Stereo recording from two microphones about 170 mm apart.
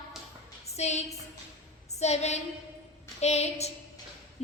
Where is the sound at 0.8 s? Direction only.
40° left (ahead or behind).